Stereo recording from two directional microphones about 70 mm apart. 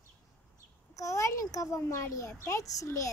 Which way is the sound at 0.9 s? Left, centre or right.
Left.